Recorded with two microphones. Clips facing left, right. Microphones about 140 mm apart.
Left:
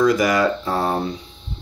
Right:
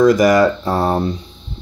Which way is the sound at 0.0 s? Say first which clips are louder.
Right 6 dB; 40° right (ahead or behind).